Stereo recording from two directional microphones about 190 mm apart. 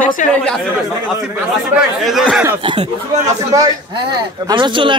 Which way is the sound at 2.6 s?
30° right (ahead or behind).